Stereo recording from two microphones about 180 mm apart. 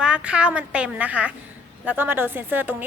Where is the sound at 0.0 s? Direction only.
5° right (ahead or behind).